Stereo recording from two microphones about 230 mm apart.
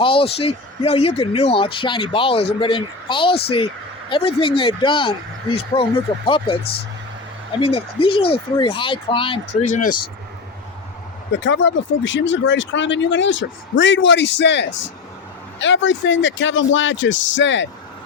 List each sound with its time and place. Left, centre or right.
0.0 s speech: left
7.6 s speech: left
11.3 s speech: left